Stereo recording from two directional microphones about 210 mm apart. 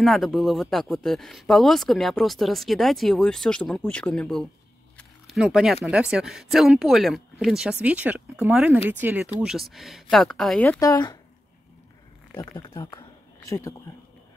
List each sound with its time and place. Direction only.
0.0 s speech: centre (ahead or behind)
4.9 s a sound: centre (ahead or behind)
5.9 s speech: 5° right (ahead or behind); by 11.1 s 20° left (ahead or behind)
12.4 s speech: 20° left (ahead or behind)